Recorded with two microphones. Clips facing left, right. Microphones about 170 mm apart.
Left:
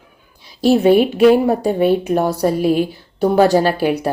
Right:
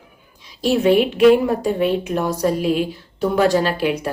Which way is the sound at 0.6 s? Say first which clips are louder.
Left 4 dB; 35° left (ahead or behind).